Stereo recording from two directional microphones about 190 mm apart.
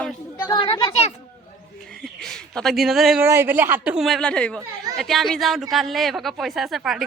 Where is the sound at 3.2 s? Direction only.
10° right (ahead or behind).